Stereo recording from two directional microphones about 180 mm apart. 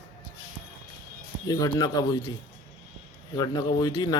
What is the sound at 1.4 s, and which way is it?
Speech, 20° left (ahead or behind).